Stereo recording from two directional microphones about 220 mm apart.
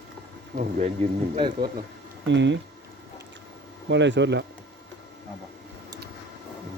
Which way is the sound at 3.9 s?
55° right (ahead or behind).